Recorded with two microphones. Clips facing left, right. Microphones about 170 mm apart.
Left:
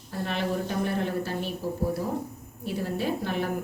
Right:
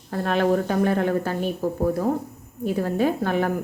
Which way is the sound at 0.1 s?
60° right (ahead or behind).